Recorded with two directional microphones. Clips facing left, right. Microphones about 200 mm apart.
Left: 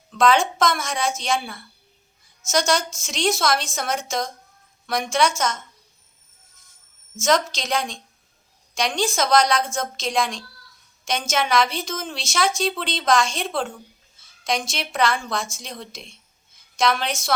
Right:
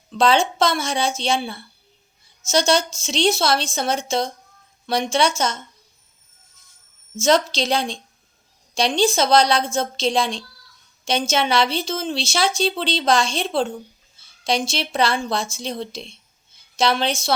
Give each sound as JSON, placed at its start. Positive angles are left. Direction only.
{"t": 0.1, "sound": "a woman's voice", "side_deg": -30}
{"t": 7.2, "sound": "a woman's voice", "side_deg": -30}